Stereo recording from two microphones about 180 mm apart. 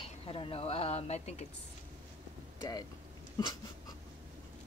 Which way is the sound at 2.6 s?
20° left (ahead or behind).